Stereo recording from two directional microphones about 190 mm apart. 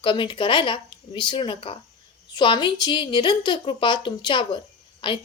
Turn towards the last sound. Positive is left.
turn(degrees=25)  # may be behind; listen again after turning